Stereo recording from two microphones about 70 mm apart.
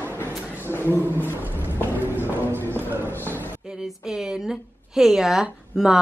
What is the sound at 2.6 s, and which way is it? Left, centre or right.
Music, left.